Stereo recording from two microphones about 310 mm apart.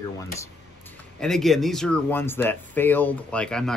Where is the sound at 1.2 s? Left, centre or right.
Centre.